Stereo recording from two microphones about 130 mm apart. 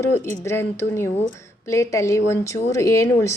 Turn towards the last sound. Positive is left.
turn(degrees=20)  # may be behind; listen again after turning